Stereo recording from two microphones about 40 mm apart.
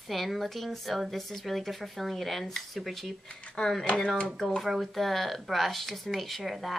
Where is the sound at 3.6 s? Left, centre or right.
Left.